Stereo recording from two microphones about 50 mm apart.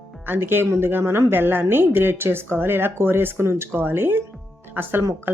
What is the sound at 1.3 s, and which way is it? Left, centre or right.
Speech, right.